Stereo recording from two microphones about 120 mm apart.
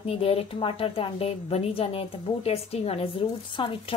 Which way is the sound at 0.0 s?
50° left (ahead or behind).